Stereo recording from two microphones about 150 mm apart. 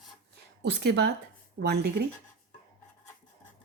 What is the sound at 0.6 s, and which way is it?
Speech, 90° right.